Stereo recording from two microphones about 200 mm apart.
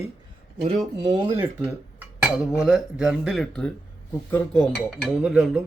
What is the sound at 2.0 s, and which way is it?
Dishes, 5° right (ahead or behind).